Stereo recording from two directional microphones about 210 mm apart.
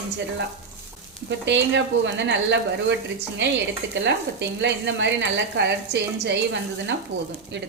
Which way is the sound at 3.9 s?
60° right (ahead or behind).